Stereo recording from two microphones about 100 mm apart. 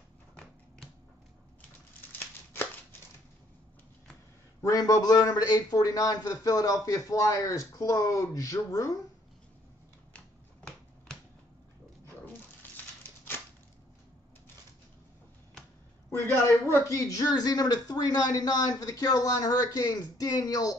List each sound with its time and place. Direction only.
2.1 s a sound: 25° left (ahead or behind)
4.6 s a man's voice: 35° left (ahead or behind)
16.6 s a man's voice: 30° left (ahead or behind)